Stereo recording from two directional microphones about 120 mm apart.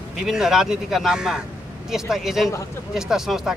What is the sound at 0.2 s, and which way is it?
Speech, 5° right (ahead or behind).